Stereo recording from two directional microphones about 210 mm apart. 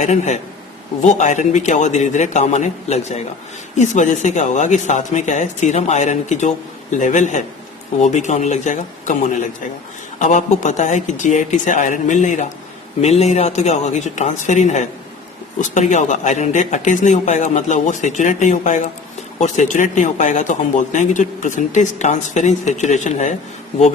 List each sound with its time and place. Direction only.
0.0 s speech: 35° left (ahead or behind)